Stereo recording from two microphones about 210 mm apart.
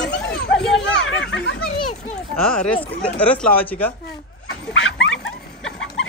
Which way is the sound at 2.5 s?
5° left (ahead or behind).